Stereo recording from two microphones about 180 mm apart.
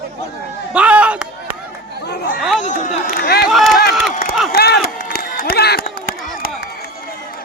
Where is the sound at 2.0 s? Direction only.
60° left (ahead or behind).